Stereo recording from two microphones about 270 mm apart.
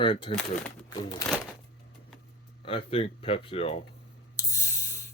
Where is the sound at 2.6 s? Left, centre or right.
Left.